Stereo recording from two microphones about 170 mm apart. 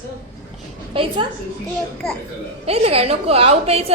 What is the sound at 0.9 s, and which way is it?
Speech, 30° right (ahead or behind).